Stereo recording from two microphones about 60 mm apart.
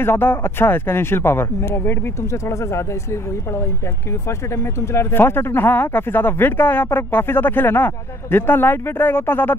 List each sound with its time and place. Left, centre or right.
0.0 s speech: left
4.9 s speech: left